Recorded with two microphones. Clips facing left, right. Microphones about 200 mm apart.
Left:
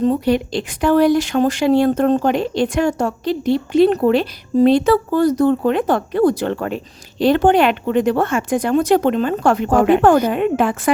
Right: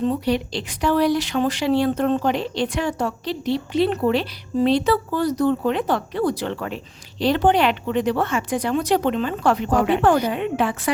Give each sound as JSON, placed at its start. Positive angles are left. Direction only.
{"t": 0.0, "sound": "speech", "side_deg": 50}